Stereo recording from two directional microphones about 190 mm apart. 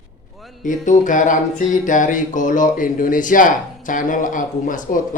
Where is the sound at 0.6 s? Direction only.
40° left (ahead or behind).